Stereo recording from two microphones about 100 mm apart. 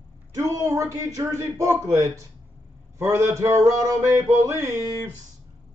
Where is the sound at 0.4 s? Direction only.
30° right (ahead or behind).